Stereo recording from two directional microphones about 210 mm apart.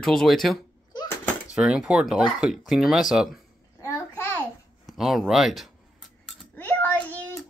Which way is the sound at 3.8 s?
10° left (ahead or behind).